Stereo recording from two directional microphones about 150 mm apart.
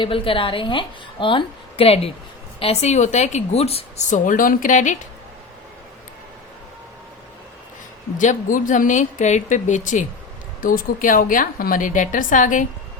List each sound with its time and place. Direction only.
0.0 s a woman's voice: 35° left (ahead or behind); by 4.9 s 55° left (ahead or behind)
8.2 s a woman's voice: 60° left (ahead or behind)